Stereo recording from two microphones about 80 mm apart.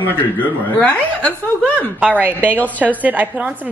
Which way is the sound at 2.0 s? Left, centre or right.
Right.